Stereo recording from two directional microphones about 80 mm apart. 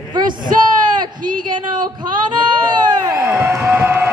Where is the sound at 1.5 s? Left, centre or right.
Right.